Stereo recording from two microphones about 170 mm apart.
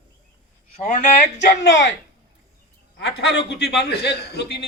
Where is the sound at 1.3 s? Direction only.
90° left.